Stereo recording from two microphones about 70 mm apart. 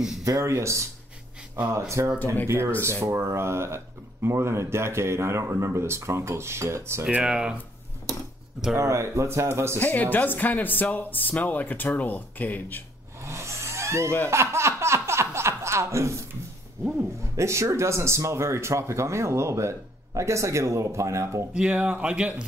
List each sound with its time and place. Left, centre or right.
0.2 s speech: right
7.1 s speech: centre
8.7 s speech: right
9.8 s speech: left
13.2 s vehicle: right
14.3 s chuckle: right
16.8 s speech: right
21.5 s speech: centre